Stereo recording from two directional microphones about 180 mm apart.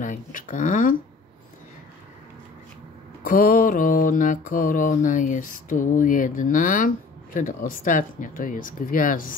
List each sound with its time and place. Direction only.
0.0 s speech: 45° left (ahead or behind)
3.3 s mantra: 50° left (ahead or behind)